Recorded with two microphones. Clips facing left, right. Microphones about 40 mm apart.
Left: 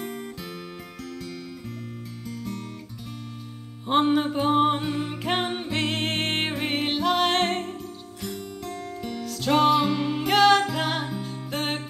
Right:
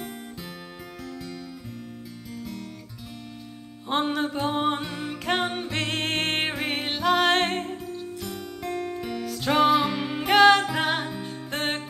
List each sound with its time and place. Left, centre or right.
1.0 s music: centre
3.8 s music: centre